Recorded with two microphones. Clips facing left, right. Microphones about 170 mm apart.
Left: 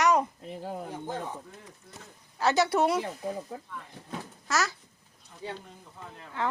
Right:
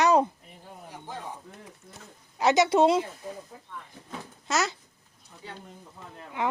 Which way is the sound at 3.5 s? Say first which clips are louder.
Left 8 dB; 70° left (ahead or behind).